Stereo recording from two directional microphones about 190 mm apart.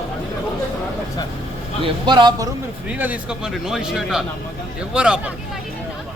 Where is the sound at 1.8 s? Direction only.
25° right (ahead or behind).